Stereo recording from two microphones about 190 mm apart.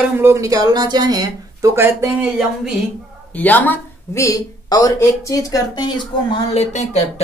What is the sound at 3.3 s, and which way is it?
Speech, 10° left (ahead or behind).